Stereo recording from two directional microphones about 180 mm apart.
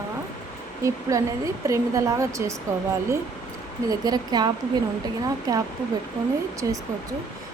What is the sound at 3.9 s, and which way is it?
Speech, 20° right (ahead or behind).